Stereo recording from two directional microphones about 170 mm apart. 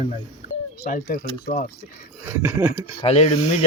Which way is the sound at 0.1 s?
50° left (ahead or behind).